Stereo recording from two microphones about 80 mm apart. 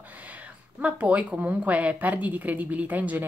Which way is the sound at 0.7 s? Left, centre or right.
Centre.